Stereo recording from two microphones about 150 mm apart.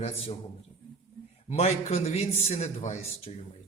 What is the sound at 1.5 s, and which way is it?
A man's voice, 45° left (ahead or behind).